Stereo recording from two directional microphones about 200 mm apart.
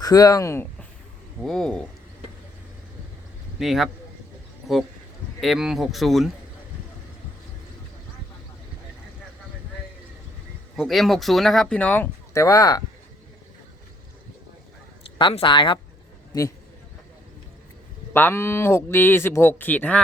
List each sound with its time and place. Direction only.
0.0 s speech: 20° left (ahead or behind)
3.6 s speech: centre (ahead or behind)
5.4 s speech: centre (ahead or behind)
10.8 s speech: centre (ahead or behind); by 12.8 s 15° left (ahead or behind)
15.2 s speech: 25° left (ahead or behind)
18.1 s speech: 10° left (ahead or behind)